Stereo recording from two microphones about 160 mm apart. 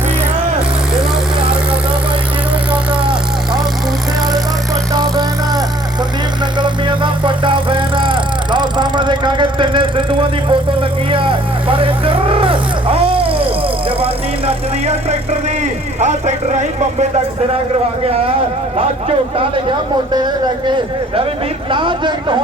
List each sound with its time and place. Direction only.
6.6 s vehicle: 30° right (ahead or behind)
16.0 s speech: 45° right (ahead or behind)
21.7 s speech: 30° right (ahead or behind)